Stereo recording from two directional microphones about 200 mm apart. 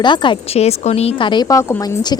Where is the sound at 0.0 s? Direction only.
25° left (ahead or behind).